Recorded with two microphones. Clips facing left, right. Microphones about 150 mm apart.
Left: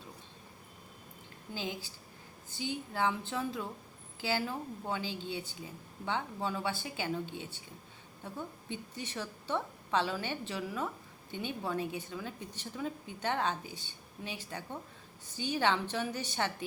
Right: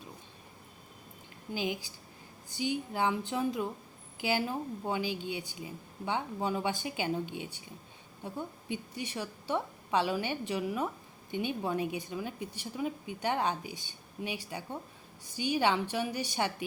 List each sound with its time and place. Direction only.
1.5 s a woman's voice: 15° right (ahead or behind)